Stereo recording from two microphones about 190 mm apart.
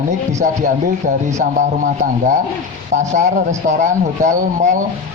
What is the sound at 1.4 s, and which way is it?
A man's voice, 40° right (ahead or behind).